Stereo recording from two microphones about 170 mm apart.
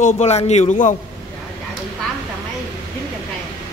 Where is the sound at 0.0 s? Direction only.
40° left (ahead or behind).